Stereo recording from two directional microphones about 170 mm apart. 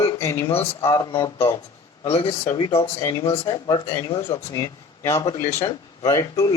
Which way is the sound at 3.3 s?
35° left (ahead or behind).